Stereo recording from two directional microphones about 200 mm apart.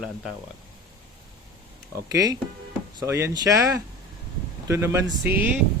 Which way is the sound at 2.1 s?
20° right (ahead or behind).